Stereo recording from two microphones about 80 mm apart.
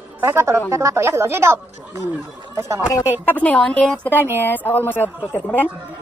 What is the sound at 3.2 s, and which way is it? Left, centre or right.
Speech, centre.